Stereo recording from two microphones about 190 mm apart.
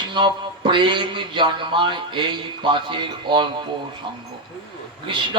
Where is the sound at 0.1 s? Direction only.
25° right (ahead or behind).